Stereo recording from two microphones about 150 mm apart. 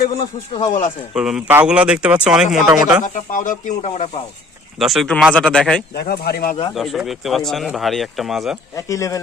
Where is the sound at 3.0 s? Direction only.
55° left (ahead or behind).